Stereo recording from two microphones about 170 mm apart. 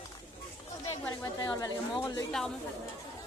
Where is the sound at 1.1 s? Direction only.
20° left (ahead or behind).